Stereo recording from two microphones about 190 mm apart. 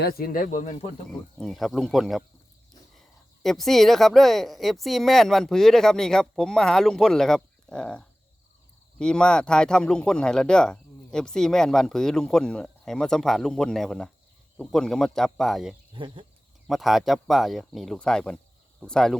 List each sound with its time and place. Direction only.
0.0 s speech: 55° left (ahead or behind); by 0.9 s 35° left (ahead or behind)
1.4 s speech: centre (ahead or behind)
3.4 s speech: centre (ahead or behind)
15.9 s speech: 25° right (ahead or behind)
16.6 s speech: centre (ahead or behind)